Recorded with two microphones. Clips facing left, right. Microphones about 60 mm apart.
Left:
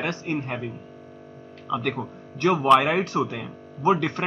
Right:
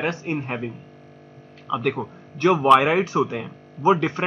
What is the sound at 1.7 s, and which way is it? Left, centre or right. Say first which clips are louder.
Speech: right 3 dB; centre.